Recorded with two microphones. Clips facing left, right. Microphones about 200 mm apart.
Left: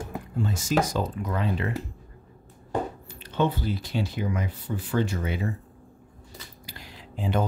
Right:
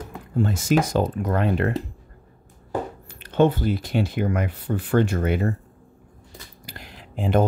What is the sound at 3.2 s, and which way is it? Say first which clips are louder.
Speech: right 7 dB; 50° right (ahead or behind).